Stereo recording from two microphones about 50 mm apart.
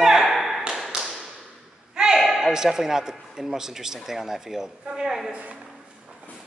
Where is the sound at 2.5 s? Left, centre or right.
Centre.